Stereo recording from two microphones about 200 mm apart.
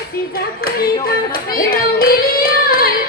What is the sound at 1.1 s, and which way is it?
Music, 45° left (ahead or behind).